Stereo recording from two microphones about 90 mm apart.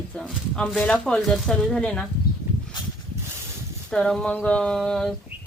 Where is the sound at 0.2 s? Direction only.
5° left (ahead or behind).